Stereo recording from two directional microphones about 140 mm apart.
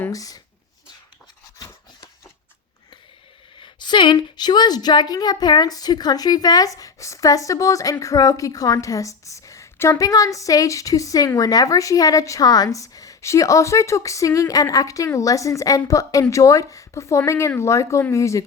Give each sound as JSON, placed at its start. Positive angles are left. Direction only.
{"t": 0.1, "sound": "speech", "side_deg": 25}
{"t": 3.6, "sound": "a woman's voice", "side_deg": 35}